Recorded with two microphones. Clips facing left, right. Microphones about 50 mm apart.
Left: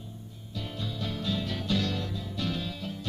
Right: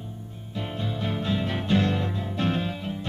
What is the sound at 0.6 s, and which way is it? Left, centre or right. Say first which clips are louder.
Music: right 5 dB; right.